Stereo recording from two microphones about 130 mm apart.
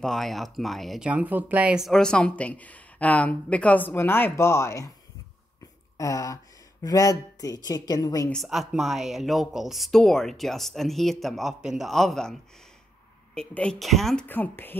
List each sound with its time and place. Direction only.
0.0 s speech: centre (ahead or behind)
1.9 s speech: 5° left (ahead or behind); by 4.9 s 20° left (ahead or behind)
5.9 s speech: 25° left (ahead or behind)
8.3 s speech: centre (ahead or behind)
14.2 s speech: 15° left (ahead or behind)